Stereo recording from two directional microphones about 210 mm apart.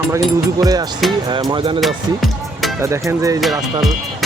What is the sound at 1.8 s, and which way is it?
Music, centre (ahead or behind).